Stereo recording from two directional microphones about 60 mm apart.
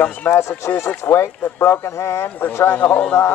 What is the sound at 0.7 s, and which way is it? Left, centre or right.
Speech, left.